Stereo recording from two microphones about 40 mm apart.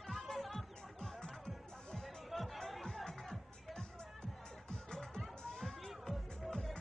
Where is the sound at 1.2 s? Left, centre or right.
Centre.